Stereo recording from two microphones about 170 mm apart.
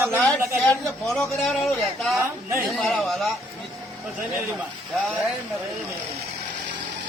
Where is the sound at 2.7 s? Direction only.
5° left (ahead or behind).